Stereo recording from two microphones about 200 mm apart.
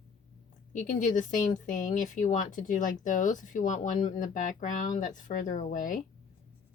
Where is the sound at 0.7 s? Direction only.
40° left (ahead or behind).